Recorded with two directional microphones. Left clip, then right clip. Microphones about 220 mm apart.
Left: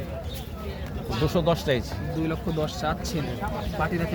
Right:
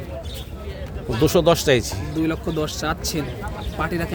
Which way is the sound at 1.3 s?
55° right (ahead or behind).